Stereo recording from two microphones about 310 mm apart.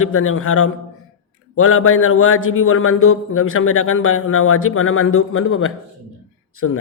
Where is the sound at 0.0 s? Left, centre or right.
Left.